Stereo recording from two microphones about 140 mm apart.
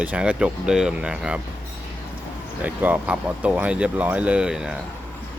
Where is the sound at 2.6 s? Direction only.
10° right (ahead or behind).